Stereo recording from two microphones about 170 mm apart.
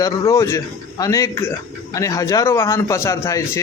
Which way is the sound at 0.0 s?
20° left (ahead or behind).